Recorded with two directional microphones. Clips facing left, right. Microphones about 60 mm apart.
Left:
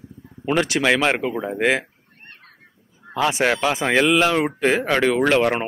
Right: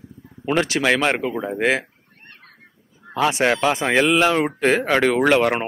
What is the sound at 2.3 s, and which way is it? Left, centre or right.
Goose, left.